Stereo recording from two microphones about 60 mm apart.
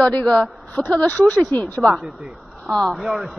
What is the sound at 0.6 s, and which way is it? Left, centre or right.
A woman's voice, centre.